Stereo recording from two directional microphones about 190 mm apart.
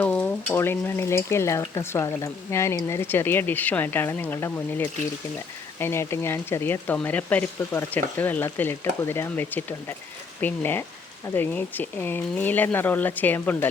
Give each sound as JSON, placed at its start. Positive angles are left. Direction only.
{"t": 0.0, "sound": "stir", "side_deg": 10}